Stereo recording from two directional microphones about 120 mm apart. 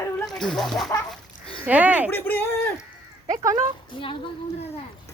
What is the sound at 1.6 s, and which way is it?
Speech, 15° right (ahead or behind).